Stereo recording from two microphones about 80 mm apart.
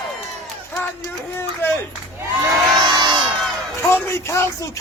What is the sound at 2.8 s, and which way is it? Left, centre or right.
Crowd, right.